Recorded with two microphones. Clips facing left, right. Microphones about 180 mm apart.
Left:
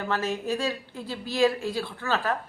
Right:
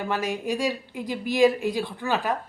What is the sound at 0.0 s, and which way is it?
A woman's voice, 15° right (ahead or behind).